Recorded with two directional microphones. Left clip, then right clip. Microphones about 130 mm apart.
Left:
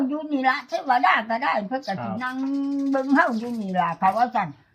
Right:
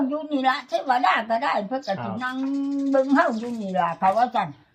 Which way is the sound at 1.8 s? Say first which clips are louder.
Right 2 dB; 40° right (ahead or behind).